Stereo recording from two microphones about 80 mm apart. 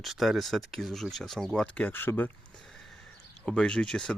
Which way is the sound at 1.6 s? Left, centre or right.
Centre.